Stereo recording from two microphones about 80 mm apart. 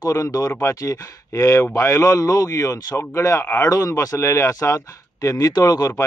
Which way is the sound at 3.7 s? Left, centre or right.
Left.